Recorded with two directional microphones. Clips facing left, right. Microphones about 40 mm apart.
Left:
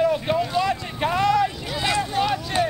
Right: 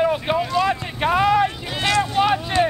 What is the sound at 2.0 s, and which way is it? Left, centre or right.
Vehicle, right.